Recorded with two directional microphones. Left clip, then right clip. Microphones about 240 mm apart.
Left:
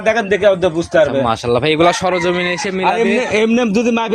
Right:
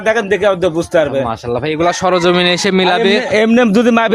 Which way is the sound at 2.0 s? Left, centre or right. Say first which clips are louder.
Right 4 dB; right.